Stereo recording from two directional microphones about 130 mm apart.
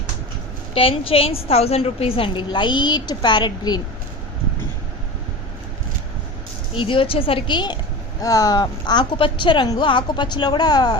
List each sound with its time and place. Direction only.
0.7 s a woman's voice: 45° left (ahead or behind)
6.7 s a woman's voice: 40° left (ahead or behind)